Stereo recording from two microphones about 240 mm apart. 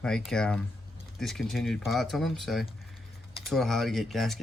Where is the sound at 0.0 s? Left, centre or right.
Centre.